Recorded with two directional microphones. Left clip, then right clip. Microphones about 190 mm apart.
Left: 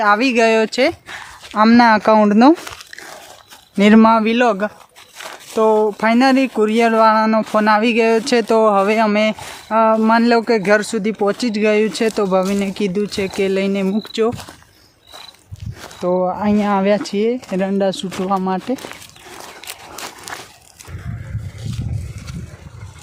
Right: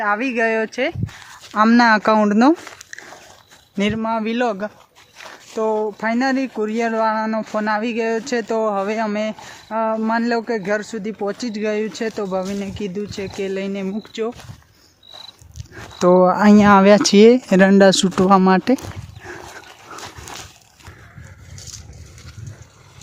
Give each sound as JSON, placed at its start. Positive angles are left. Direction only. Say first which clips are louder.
{"t": 0.0, "sound": "speech", "louder": "left 6 dB", "side_deg": 10}
{"t": 1.5, "sound": "speech", "louder": "left 2 dB", "side_deg": -10}
{"t": 4.2, "sound": "speech", "louder": "left 6 dB", "side_deg": -5}
{"t": 5.5, "sound": "speech", "louder": "left 6 dB", "side_deg": 10}
{"t": 16.0, "sound": "speech", "louder": "right 5 dB", "side_deg": -50}
{"t": 20.3, "sound": "a sound", "louder": "left 4 dB", "side_deg": 15}